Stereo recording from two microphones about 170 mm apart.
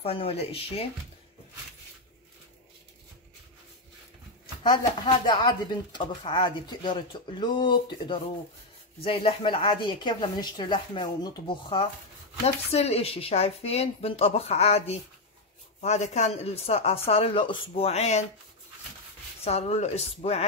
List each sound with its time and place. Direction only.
0.0 s speech: 35° left (ahead or behind)
4.6 s speech: 25° left (ahead or behind)
19.4 s speech: 40° left (ahead or behind)